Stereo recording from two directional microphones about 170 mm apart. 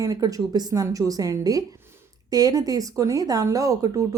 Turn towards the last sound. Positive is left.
turn(degrees=-20)  # may be behind; listen again after turning